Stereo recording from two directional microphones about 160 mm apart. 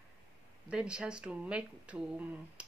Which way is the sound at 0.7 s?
5° right (ahead or behind).